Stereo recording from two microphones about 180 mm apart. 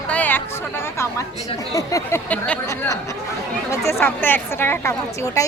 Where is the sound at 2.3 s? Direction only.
10° left (ahead or behind).